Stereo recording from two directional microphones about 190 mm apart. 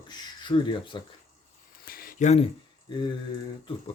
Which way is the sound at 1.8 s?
50° left (ahead or behind).